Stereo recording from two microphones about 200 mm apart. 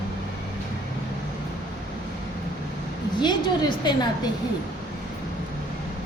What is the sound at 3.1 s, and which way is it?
Speech, 20° left (ahead or behind).